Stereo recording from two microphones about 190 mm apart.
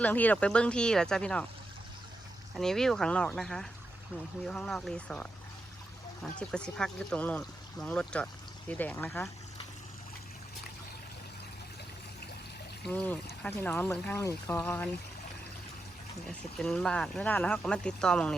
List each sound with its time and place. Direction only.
0.0 s speech: 10° left (ahead or behind)
2.6 s speech: centre (ahead or behind)
6.5 s speech: 5° left (ahead or behind)
12.8 s speech: 10° left (ahead or behind)
16.3 s speech: 5° left (ahead or behind)